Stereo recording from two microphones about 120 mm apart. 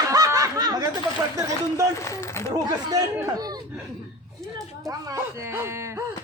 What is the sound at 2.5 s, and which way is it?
Speech, 30° right (ahead or behind).